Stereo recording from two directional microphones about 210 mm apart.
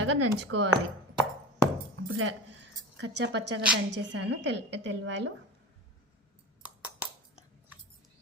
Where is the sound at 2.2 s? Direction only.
55° right (ahead or behind).